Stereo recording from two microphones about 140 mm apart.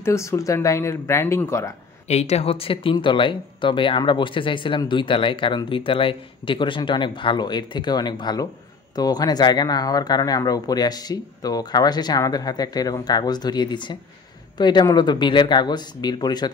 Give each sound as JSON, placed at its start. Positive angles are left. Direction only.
{"t": 0.0, "sound": "speech", "side_deg": 20}
{"t": 2.0, "sound": "speech", "side_deg": 50}